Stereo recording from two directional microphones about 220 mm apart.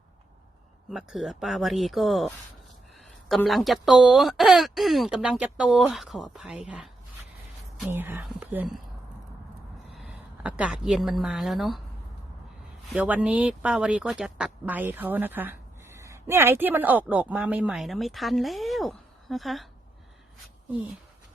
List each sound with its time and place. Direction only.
0.9 s speech: centre (ahead or behind)
9.9 s a woman's voice: centre (ahead or behind)
12.9 s speech: 5° right (ahead or behind)